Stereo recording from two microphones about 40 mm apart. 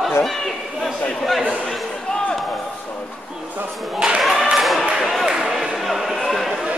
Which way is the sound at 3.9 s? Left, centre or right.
Right.